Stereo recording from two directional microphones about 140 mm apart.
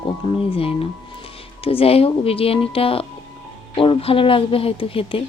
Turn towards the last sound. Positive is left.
turn(degrees=40)  # may be behind; listen again after turning